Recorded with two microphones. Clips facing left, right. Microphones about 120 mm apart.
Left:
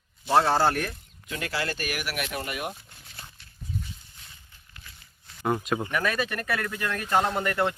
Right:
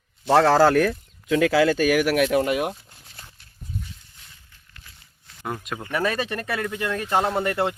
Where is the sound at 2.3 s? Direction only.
90° right.